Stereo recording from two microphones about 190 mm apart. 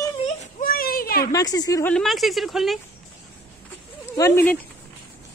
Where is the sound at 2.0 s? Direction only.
Centre (ahead or behind).